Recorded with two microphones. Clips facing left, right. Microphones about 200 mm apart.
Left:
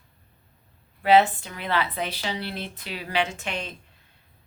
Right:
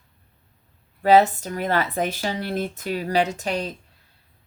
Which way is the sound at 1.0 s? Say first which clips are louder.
Right 3 dB; 40° right (ahead or behind).